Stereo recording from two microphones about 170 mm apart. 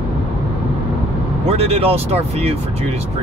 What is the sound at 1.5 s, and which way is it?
Speech, 35° right (ahead or behind).